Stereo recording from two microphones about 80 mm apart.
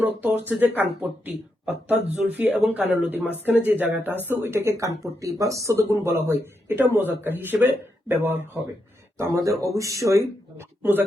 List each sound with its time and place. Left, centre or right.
0.0 s speech: right
4.5 s speech: right
9.1 s speech: right